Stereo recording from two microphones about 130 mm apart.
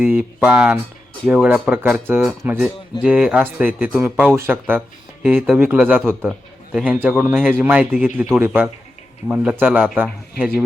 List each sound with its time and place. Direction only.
0.0 s a man's voice: 15° right (ahead or behind)